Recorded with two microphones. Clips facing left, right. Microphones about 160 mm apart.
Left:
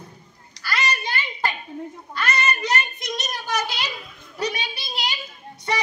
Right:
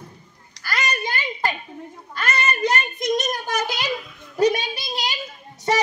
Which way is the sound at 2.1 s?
50° right (ahead or behind).